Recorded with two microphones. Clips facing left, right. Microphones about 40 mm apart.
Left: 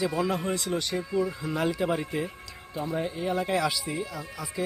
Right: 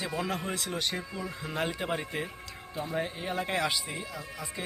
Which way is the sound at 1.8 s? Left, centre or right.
Right.